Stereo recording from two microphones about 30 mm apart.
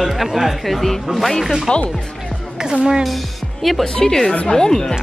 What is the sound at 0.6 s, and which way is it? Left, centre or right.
Speech, centre.